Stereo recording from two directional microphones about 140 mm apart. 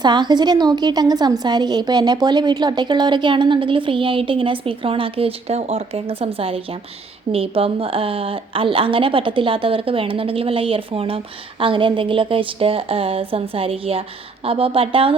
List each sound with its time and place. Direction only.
0.0 s a woman's voice: 30° right (ahead or behind)